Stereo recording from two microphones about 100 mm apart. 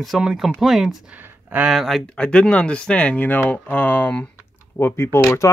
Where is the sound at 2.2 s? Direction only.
10° left (ahead or behind); by 5.2 s 25° left (ahead or behind).